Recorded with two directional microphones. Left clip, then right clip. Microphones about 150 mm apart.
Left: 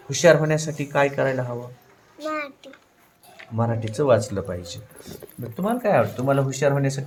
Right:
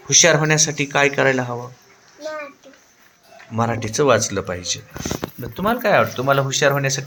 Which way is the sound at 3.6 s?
25° right (ahead or behind).